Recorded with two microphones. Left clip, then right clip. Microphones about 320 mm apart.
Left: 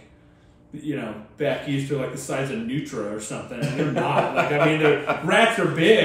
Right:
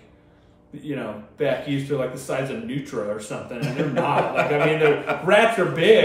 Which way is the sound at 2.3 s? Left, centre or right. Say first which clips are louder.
Even; centre.